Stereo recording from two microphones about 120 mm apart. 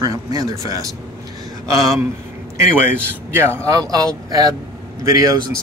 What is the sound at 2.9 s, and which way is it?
Speech, 20° right (ahead or behind).